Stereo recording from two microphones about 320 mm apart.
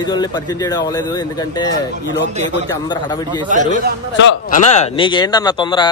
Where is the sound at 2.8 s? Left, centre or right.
Centre.